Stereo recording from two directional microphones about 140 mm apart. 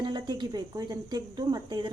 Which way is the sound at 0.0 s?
30° right (ahead or behind).